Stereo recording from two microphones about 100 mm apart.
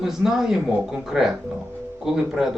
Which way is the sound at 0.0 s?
5° right (ahead or behind).